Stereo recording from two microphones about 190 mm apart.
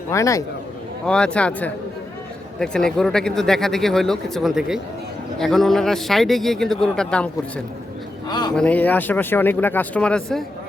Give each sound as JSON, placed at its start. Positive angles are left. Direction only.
{"t": 0.1, "sound": "speech", "side_deg": 15}
{"t": 1.0, "sound": "speech", "side_deg": 5}
{"t": 8.3, "sound": "a man's voice", "side_deg": 20}
{"t": 8.5, "sound": "speech", "side_deg": 5}